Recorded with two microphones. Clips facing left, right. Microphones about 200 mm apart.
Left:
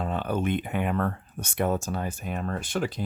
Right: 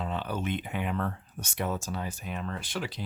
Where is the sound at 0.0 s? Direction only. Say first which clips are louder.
Left 5 dB; 50° left (ahead or behind).